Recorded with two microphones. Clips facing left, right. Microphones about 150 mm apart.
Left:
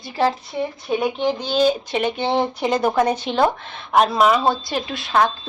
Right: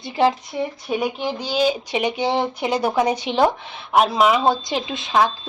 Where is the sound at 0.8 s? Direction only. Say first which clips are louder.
Left 5 dB; 10° right (ahead or behind).